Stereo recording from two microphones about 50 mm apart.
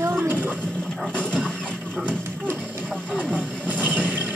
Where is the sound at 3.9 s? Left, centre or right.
Right.